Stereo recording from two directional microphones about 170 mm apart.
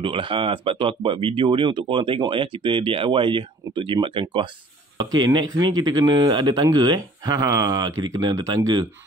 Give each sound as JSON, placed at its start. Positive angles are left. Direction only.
{"t": 0.0, "sound": "speech", "side_deg": -30}